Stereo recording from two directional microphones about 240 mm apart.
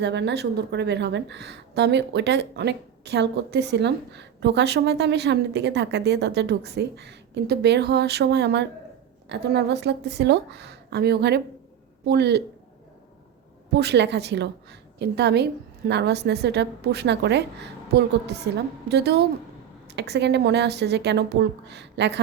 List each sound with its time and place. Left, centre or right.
0.0 s speech: right
13.7 s a woman's voice: right